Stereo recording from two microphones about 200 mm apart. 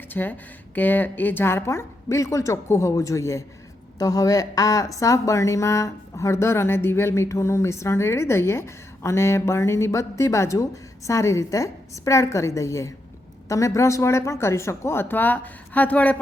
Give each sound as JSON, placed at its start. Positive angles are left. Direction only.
{"t": 0.1, "sound": "a woman's voice", "side_deg": 10}